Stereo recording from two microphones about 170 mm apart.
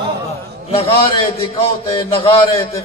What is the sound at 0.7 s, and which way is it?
A man's voice, 30° left (ahead or behind).